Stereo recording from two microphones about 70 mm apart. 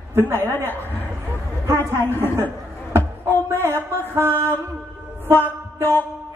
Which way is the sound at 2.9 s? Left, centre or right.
Right.